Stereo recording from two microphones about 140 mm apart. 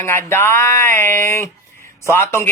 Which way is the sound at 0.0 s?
15° left (ahead or behind).